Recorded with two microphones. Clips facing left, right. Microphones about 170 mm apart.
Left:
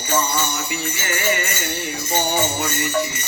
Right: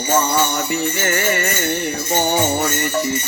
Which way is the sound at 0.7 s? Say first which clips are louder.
Right 6 dB; 50° right (ahead or behind).